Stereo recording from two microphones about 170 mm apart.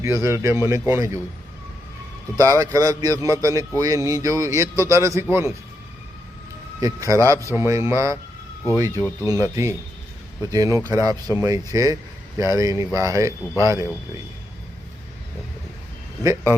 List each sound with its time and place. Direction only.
0.0 s a man's voice: 15° right (ahead or behind)
2.4 s a man's voice: 15° right (ahead or behind)
6.7 s a man's voice: 20° right (ahead or behind)
16.2 s a man's voice: 15° right (ahead or behind)